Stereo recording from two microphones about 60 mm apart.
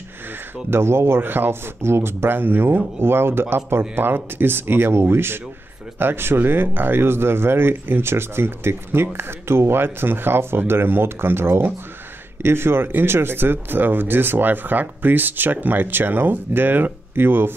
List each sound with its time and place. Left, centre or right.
0.7 s speech: right